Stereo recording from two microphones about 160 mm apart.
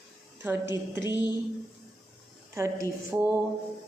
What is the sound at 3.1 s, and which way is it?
Speech, 15° right (ahead or behind).